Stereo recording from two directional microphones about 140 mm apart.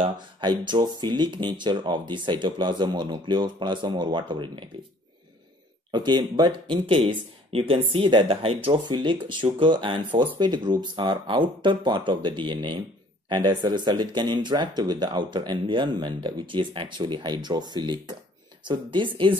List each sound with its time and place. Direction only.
0.0 s speech: 35° right (ahead or behind)
5.9 s speech: 30° right (ahead or behind)